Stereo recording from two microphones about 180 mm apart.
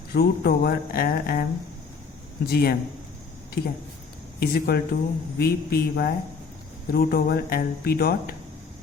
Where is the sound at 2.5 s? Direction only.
60° left (ahead or behind).